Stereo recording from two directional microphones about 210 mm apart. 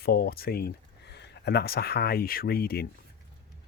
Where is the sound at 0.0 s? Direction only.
50° left (ahead or behind).